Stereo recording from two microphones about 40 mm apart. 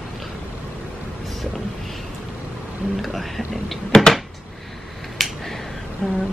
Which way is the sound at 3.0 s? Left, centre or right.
Centre.